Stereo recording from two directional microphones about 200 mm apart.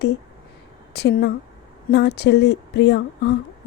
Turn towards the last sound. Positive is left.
turn(degrees=60)  # may be behind; listen again after turning